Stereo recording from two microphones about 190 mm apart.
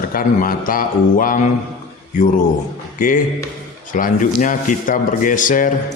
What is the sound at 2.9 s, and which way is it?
A man's voice, 45° left (ahead or behind).